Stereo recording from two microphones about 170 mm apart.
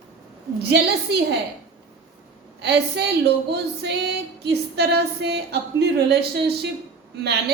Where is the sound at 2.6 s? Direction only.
85° right.